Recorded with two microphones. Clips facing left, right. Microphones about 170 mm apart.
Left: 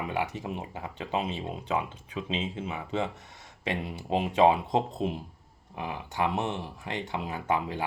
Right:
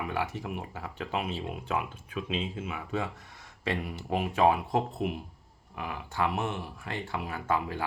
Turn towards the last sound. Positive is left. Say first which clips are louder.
# left 1 dB
turn(degrees=20)  # may be behind; listen again after turning